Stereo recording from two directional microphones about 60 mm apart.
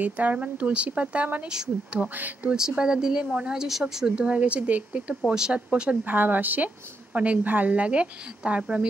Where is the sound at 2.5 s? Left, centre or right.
Centre.